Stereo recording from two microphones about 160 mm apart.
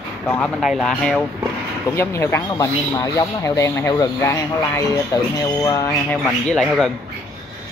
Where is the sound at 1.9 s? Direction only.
15° left (ahead or behind).